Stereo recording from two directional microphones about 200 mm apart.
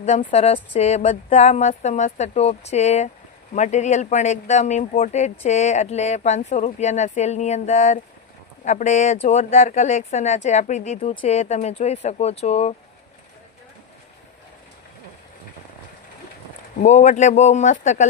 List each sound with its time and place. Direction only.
0.0 s speech: 40° left (ahead or behind)
16.8 s speech: 35° left (ahead or behind)